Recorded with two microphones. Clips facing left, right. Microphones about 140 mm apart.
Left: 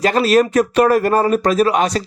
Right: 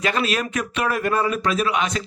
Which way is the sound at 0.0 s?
40° left (ahead or behind).